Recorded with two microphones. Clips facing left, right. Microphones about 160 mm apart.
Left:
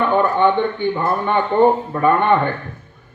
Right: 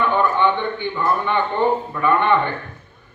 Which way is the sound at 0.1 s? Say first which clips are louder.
Left 3 dB; 45° left (ahead or behind).